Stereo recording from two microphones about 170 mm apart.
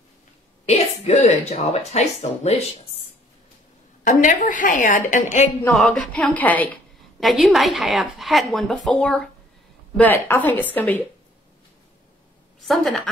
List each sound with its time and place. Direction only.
0.7 s a woman's voice: 40° left (ahead or behind)
4.0 s a woman's voice: 50° left (ahead or behind)
5.7 s a woman's voice: centre (ahead or behind)
12.5 s a woman's voice: centre (ahead or behind)